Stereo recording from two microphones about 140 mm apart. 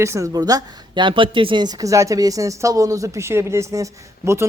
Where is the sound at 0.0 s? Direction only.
20° right (ahead or behind).